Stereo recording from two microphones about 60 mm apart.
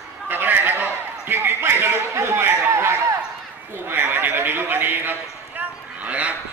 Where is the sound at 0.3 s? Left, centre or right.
Right.